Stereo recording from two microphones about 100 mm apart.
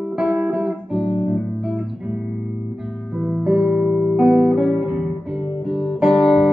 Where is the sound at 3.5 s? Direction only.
Centre (ahead or behind).